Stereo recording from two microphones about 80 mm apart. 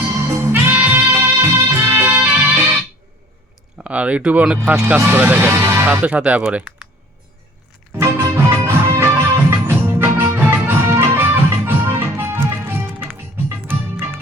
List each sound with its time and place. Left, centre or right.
0.1 s music: right
3.8 s speech: centre
6.1 s speech: centre
7.9 s music: right